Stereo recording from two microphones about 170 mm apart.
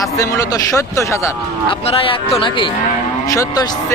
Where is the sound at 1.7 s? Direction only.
35° left (ahead or behind).